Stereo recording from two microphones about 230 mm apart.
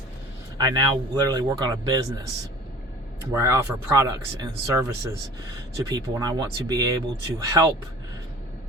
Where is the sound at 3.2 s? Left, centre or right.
Centre.